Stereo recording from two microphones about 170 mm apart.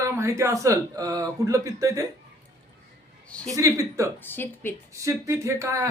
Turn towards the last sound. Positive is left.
turn(degrees=-20)  # may be behind; listen again after turning